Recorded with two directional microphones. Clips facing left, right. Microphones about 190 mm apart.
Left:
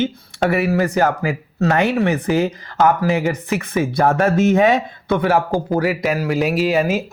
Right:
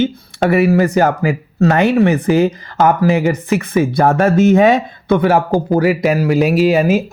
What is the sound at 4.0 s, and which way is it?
Speech, 40° right (ahead or behind).